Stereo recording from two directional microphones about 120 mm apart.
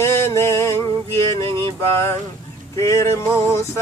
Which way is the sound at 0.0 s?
25° left (ahead or behind).